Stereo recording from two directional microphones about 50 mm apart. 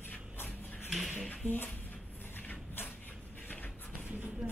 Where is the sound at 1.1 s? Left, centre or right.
Left.